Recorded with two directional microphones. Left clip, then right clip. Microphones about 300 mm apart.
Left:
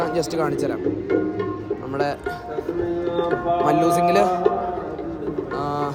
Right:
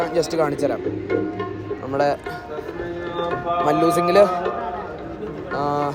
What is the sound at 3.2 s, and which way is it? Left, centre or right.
Music, left.